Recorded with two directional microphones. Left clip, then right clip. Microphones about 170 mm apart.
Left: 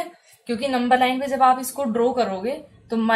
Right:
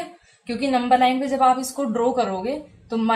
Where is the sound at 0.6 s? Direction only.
30° left (ahead or behind).